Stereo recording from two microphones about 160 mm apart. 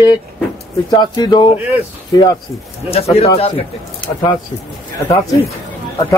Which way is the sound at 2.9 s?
40° left (ahead or behind).